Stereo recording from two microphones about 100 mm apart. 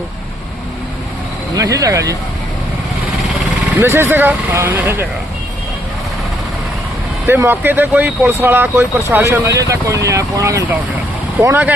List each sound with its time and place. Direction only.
1.5 s speech: 35° right (ahead or behind)
3.8 s speech: 25° right (ahead or behind)
7.3 s speech: 20° right (ahead or behind)
11.4 s speech: 10° right (ahead or behind)